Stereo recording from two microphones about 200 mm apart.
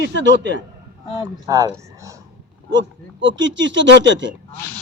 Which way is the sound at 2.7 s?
65° right (ahead or behind).